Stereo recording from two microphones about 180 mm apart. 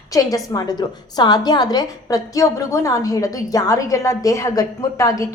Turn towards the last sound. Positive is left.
turn(degrees=20)  # may be behind; listen again after turning